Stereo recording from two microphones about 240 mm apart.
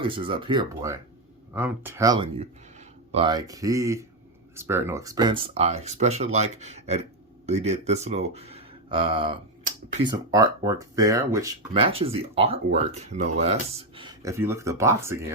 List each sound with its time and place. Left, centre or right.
0.0 s speech: right
11.7 s speech: right